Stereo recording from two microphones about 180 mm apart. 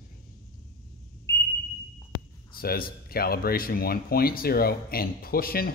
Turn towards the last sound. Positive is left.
turn(degrees=55)  # may be behind; listen again after turning